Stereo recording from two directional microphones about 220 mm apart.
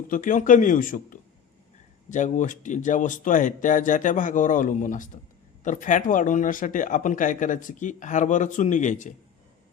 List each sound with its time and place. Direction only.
0.1 s speech: 35° left (ahead or behind)